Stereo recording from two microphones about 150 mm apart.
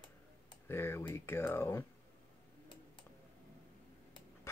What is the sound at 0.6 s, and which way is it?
Speech, 15° left (ahead or behind).